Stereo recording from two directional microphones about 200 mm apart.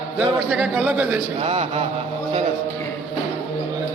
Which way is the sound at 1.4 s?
30° right (ahead or behind).